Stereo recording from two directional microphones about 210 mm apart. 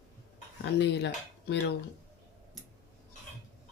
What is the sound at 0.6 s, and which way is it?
Speech, 55° left (ahead or behind).